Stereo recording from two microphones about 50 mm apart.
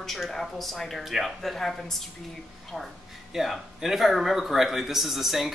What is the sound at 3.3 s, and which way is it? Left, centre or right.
Speech, centre.